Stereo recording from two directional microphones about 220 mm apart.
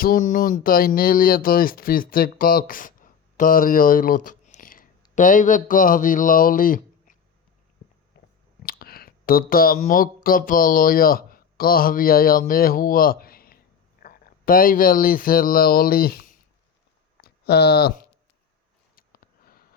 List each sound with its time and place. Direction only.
0.0 s speech: 40° left (ahead or behind)
8.6 s speech: 45° left (ahead or behind)
18.9 s a sound: 40° left (ahead or behind)